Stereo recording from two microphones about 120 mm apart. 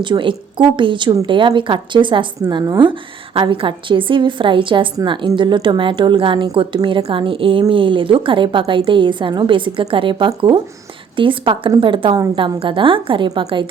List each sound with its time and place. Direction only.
0.0 s a woman's voice: 45° right (ahead or behind)